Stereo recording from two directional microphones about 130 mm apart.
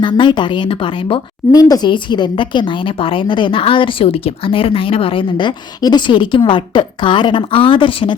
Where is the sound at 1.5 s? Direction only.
30° left (ahead or behind).